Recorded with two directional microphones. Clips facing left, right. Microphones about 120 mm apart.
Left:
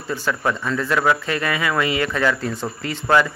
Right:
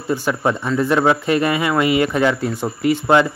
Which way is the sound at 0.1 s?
15° right (ahead or behind).